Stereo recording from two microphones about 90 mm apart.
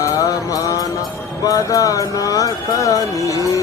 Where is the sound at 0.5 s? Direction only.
40° left (ahead or behind).